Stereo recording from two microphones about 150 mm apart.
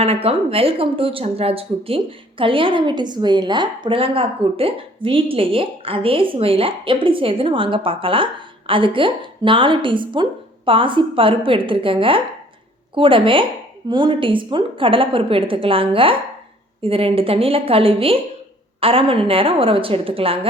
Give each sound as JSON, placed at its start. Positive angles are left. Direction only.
{"t": 0.0, "sound": "speech", "side_deg": -40}